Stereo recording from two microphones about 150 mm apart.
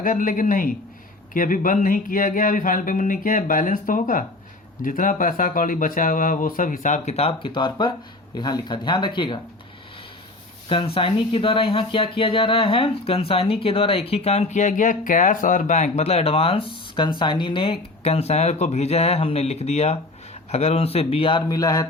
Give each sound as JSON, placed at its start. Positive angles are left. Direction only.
{"t": 0.0, "sound": "speech", "side_deg": 65}
{"t": 7.4, "sound": "speech", "side_deg": 30}
{"t": 10.7, "sound": "speech", "side_deg": 35}
{"t": 21.4, "sound": "a sound", "side_deg": 25}